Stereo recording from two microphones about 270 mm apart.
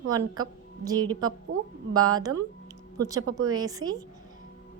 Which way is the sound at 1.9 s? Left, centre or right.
Centre.